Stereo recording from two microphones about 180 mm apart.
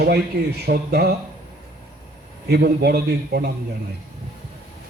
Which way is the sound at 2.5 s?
65° right (ahead or behind).